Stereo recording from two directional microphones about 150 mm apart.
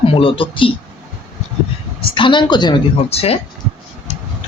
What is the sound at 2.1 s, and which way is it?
Speech, 35° left (ahead or behind).